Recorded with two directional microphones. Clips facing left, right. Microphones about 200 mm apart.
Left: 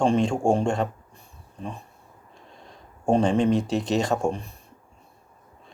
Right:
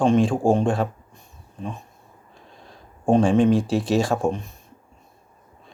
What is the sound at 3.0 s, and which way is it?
Speech, 5° right (ahead or behind).